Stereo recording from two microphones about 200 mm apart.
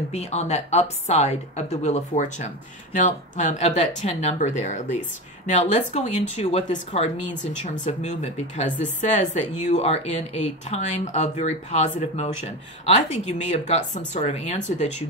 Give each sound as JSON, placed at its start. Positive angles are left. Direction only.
{"t": 0.1, "sound": "a woman's voice", "side_deg": 35}